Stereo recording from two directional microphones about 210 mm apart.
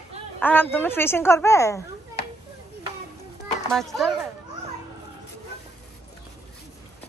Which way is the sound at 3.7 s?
Centre (ahead or behind).